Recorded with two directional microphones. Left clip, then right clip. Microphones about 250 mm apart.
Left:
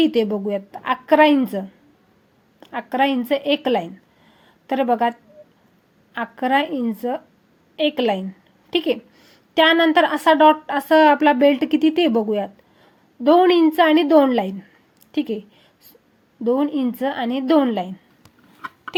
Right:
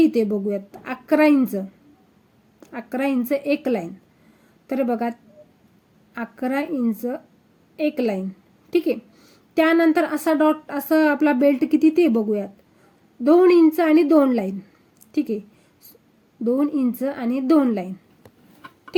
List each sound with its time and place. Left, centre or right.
0.0 s a woman's voice: centre
2.6 s a woman's voice: centre
6.1 s a woman's voice: centre
16.4 s a woman's voice: centre